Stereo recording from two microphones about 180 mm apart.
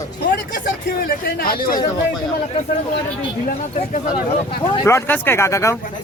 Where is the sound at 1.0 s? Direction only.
55° left (ahead or behind).